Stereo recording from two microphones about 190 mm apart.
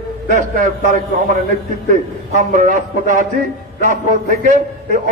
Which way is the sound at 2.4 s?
40° right (ahead or behind).